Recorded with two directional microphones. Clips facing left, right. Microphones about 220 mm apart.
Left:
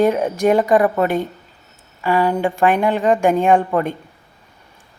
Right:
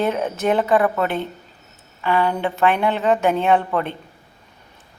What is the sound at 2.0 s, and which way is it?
A woman's voice, 10° left (ahead or behind).